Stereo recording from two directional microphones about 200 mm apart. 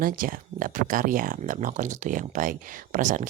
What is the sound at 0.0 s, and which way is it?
Speech, 45° right (ahead or behind).